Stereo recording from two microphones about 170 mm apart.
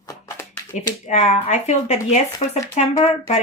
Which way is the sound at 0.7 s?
45° left (ahead or behind).